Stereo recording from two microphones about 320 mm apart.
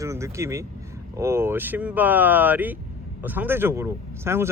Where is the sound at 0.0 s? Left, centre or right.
Centre.